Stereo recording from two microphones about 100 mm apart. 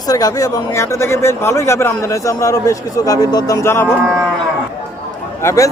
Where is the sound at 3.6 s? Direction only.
25° left (ahead or behind).